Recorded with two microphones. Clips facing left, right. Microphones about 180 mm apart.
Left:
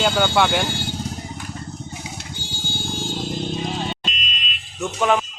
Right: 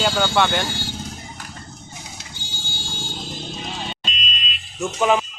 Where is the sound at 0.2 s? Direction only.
10° left (ahead or behind).